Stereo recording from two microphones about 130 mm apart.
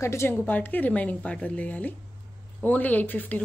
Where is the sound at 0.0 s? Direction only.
20° left (ahead or behind).